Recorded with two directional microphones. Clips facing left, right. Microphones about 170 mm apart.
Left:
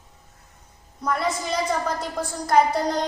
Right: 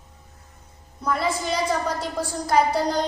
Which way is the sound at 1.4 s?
Centre (ahead or behind).